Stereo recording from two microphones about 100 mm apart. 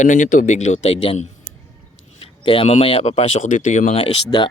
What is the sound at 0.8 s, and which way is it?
Speech, 65° left (ahead or behind).